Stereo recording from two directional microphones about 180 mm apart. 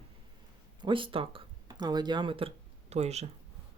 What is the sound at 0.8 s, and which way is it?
Speech, 30° right (ahead or behind).